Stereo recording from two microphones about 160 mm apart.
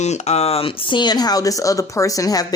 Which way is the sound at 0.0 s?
45° left (ahead or behind).